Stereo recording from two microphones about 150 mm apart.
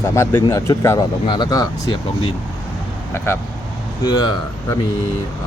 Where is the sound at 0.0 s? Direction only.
20° left (ahead or behind).